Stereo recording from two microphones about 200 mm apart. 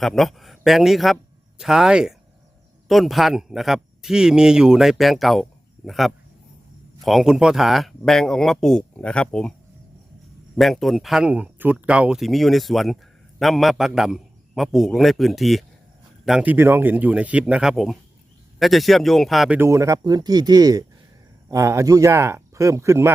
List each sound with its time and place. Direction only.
0.0 s speech: centre (ahead or behind)
10.6 s speech: centre (ahead or behind)
19.5 s speech: 15° right (ahead or behind)